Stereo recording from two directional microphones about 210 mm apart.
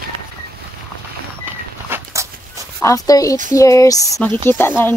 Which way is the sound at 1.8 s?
10° right (ahead or behind).